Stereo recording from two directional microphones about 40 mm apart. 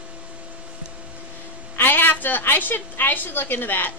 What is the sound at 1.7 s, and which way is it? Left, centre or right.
A woman's voice, left.